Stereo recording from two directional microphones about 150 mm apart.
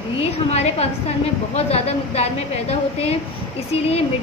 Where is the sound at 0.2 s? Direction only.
45° left (ahead or behind).